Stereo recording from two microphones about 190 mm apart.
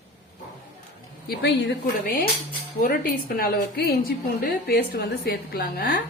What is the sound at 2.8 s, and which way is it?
A woman's voice, 45° left (ahead or behind).